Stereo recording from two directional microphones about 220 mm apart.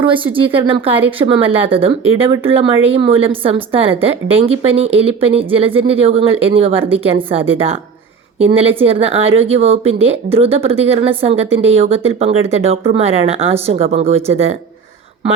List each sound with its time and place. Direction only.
0.0 s speech: 25° right (ahead or behind)
8.8 s speech: 25° right (ahead or behind)